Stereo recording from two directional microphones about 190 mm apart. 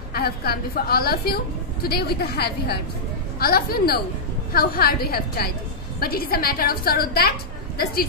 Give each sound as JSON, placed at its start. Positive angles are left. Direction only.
{"t": 0.1, "sound": "a woman's voice", "side_deg": 55}